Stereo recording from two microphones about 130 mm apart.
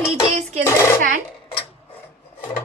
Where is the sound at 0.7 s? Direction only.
20° left (ahead or behind).